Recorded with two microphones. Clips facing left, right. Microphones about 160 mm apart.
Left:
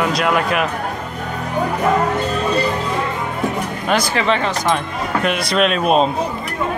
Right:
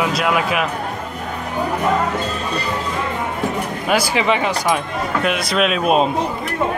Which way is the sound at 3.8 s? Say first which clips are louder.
Even; 10° right (ahead or behind).